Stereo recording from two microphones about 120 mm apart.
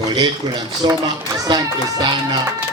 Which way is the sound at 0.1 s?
35° right (ahead or behind).